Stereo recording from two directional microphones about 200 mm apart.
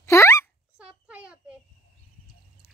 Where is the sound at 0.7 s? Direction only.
5° right (ahead or behind).